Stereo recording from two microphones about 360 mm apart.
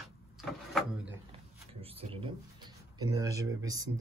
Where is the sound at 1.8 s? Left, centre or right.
Centre.